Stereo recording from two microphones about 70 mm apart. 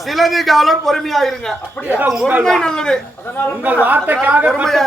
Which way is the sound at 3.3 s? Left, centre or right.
Left.